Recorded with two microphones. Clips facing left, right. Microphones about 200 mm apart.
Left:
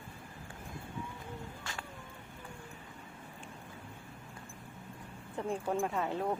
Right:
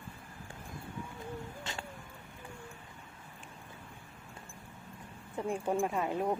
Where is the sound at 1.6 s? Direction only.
25° right (ahead or behind).